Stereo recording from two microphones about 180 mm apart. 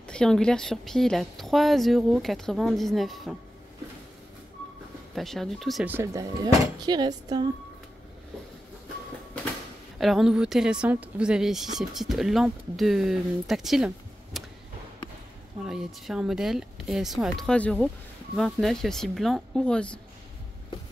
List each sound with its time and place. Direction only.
0.0 s a woman's voice: 5° left (ahead or behind)
5.1 s a woman's voice: centre (ahead or behind)
5.9 s speech: 10° right (ahead or behind)
6.4 s speech: 20° right (ahead or behind)
9.9 s a woman's voice: centre (ahead or behind)
15.6 s a woman's voice: centre (ahead or behind)